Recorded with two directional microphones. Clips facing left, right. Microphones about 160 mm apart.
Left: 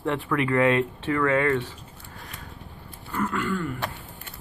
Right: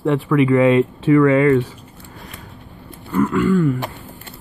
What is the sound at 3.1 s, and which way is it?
Speech, 15° right (ahead or behind).